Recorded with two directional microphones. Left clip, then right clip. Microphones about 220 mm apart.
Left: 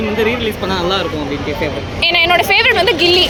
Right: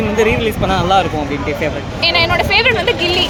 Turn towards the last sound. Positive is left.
turn(degrees=50)  # may be behind; listen again after turning